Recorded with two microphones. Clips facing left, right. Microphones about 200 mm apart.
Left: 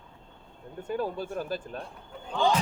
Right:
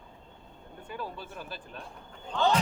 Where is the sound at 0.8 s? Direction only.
45° left (ahead or behind).